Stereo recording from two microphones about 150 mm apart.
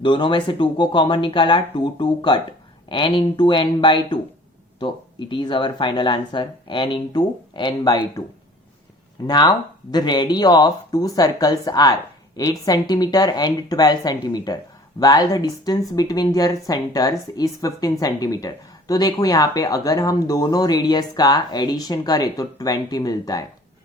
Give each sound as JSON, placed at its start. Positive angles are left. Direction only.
{"t": 0.0, "sound": "speech", "side_deg": 30}
{"t": 5.3, "sound": "speech", "side_deg": 30}
{"t": 9.2, "sound": "speech", "side_deg": 30}